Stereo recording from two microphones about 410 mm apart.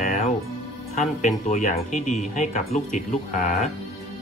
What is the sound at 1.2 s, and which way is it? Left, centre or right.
Speech, centre.